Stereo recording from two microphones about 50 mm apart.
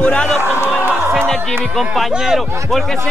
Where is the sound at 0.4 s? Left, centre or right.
Right.